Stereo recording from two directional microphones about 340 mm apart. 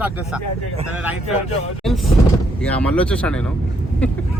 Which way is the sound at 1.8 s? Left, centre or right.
Centre.